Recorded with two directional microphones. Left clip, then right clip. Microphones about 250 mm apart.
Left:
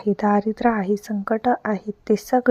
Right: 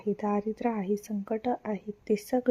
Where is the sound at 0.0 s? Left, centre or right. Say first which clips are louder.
Left 10 dB; centre.